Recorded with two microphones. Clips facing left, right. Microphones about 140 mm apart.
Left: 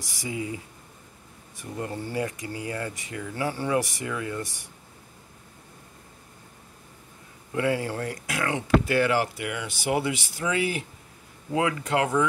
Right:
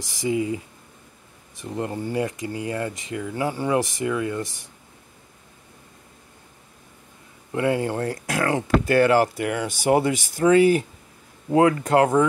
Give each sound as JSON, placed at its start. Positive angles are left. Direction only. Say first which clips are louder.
{"t": 0.1, "sound": "speech", "louder": "right 8 dB", "side_deg": -25}
{"t": 1.6, "sound": "speech", "louder": "right 5 dB", "side_deg": -25}
{"t": 7.5, "sound": "speech", "louder": "right 4 dB", "side_deg": -25}